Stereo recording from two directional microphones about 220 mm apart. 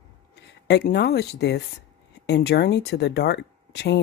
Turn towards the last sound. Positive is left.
turn(degrees=50)  # may be behind; listen again after turning